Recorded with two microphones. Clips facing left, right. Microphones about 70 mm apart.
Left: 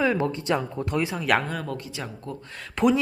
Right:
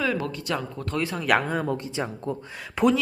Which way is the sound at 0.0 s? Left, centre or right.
Left.